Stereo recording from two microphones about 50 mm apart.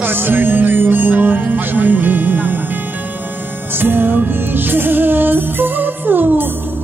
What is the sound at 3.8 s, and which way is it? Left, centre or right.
Music, right.